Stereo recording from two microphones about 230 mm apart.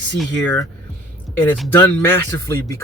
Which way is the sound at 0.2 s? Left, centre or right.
Centre.